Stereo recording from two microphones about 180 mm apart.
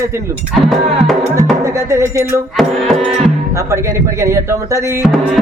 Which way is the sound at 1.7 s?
15° right (ahead or behind).